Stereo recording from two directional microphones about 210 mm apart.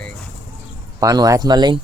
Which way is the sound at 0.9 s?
15° right (ahead or behind).